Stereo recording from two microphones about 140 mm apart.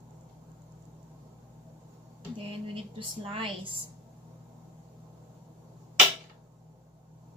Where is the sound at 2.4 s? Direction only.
40° right (ahead or behind).